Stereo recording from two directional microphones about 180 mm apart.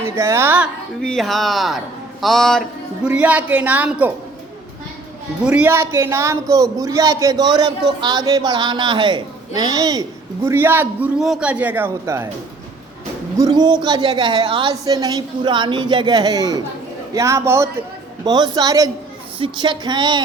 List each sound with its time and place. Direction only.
0.0 s speech: 15° right (ahead or behind)
1.0 s music: centre (ahead or behind)
3.1 s a man's voice: 10° right (ahead or behind)
5.5 s a man's voice: 10° right (ahead or behind)
13.3 s a man's voice: 20° right (ahead or behind)